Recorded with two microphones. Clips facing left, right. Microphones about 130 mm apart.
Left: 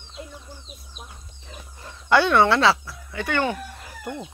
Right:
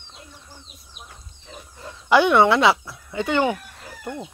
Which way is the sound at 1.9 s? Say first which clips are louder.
Right 1 dB; 5° right (ahead or behind).